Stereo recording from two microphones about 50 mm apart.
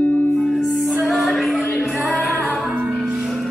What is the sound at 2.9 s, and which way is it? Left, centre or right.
Music, centre.